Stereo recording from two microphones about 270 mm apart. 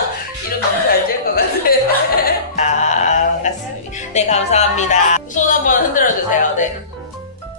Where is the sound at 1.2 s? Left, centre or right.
Left.